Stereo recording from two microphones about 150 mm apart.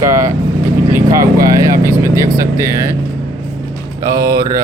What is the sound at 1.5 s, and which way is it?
Speech, 20° right (ahead or behind).